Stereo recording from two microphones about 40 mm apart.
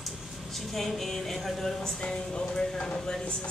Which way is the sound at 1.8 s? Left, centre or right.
Centre.